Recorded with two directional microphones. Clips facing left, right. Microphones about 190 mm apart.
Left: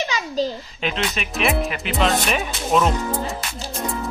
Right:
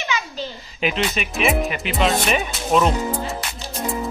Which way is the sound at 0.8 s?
5° right (ahead or behind).